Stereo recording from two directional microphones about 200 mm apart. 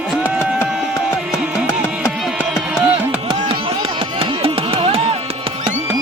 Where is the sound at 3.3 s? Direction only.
25° right (ahead or behind).